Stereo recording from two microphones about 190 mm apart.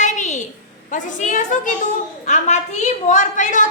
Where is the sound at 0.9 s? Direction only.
40° left (ahead or behind).